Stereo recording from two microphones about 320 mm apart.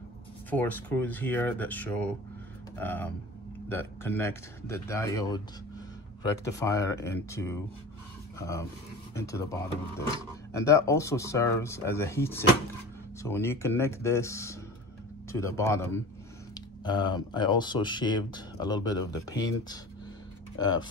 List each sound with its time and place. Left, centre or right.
0.5 s speech: centre
20.5 s speech: centre